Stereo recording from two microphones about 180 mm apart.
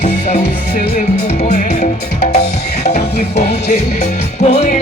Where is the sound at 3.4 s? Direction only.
40° left (ahead or behind).